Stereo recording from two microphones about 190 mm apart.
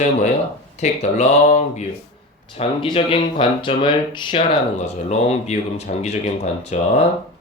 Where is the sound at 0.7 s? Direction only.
35° left (ahead or behind).